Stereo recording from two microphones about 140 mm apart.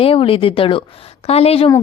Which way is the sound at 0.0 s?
40° left (ahead or behind).